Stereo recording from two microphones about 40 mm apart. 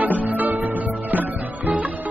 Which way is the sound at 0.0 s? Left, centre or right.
Right.